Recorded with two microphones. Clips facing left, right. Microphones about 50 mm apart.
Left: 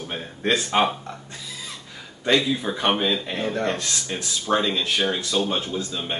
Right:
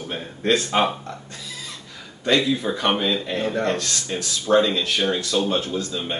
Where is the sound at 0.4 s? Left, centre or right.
Left.